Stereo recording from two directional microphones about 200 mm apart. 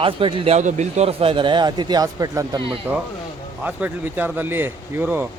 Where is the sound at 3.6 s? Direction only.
10° right (ahead or behind).